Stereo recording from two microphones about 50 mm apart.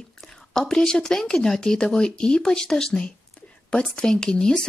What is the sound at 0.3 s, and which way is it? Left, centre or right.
A woman's voice, centre.